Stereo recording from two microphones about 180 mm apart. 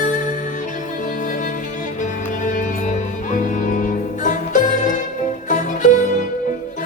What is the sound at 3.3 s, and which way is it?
Music, 45° left (ahead or behind).